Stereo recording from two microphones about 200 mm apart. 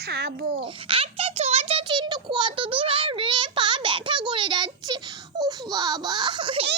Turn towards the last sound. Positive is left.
turn(degrees=-25)  # may be behind; listen again after turning